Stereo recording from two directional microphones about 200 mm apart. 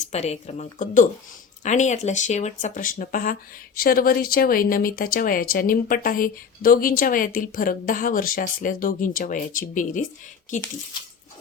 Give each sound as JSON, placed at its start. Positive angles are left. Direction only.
{"t": 0.1, "sound": "speech", "side_deg": 30}